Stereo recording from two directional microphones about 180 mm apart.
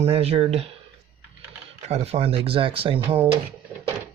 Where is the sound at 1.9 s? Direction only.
35° right (ahead or behind).